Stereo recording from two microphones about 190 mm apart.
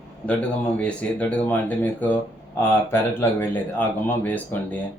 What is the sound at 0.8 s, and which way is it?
Speech, 5° left (ahead or behind).